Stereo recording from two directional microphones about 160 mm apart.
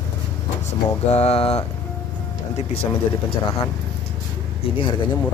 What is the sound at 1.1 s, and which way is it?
Speech, 40° left (ahead or behind).